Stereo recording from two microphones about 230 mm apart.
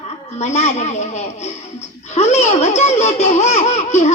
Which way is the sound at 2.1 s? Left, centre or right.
Left.